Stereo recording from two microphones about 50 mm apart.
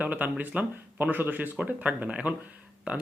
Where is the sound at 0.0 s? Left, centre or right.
Right.